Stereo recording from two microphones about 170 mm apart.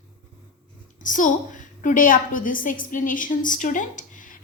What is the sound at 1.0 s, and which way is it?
A woman's voice, 50° left (ahead or behind).